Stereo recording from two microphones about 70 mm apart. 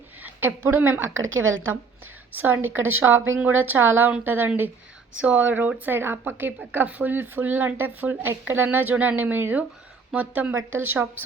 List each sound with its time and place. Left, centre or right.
0.2 s a woman's voice: right
2.3 s a woman's voice: right
10.7 s a woman's voice: right